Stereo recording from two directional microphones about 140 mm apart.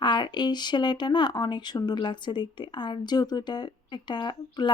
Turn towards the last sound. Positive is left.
turn(degrees=30)  # may be behind; listen again after turning